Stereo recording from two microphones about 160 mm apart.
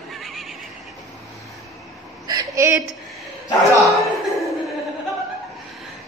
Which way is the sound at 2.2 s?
20° right (ahead or behind).